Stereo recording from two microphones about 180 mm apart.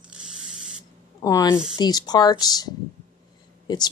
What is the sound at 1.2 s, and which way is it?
A woman's voice, 20° left (ahead or behind).